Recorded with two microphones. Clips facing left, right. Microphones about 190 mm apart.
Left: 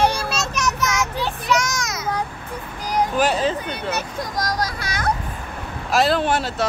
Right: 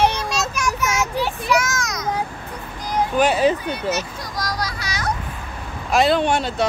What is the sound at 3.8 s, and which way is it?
Speech, 55° left (ahead or behind).